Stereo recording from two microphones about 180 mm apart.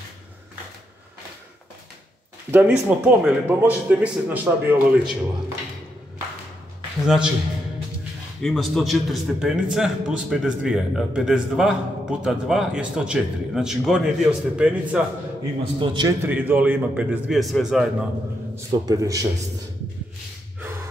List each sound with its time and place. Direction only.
2.5 s speech: 10° right (ahead or behind)
7.1 s a man's voice: 5° right (ahead or behind)
8.4 s a man's voice: centre (ahead or behind)
15.8 s a man's voice: 25° right (ahead or behind)
16.3 s speech: 10° right (ahead or behind)
18.7 s a man's voice: 20° right (ahead or behind)